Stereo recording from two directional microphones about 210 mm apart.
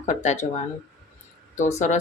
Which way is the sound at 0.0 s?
35° left (ahead or behind).